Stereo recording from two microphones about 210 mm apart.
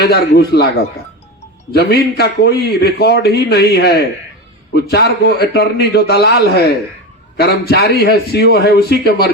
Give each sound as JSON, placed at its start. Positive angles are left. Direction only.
{"t": 0.0, "sound": "a man's voice", "side_deg": 50}